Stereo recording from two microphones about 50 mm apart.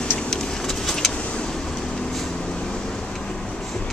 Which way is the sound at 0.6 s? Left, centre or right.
Centre.